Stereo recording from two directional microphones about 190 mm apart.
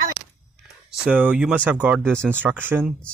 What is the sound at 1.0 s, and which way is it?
Speech, 5° right (ahead or behind).